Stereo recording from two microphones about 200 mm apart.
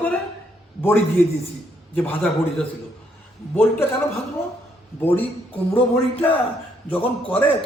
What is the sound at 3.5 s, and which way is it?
Speech, 10° left (ahead or behind).